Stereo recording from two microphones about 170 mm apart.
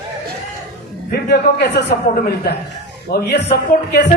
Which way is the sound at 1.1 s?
75° left (ahead or behind).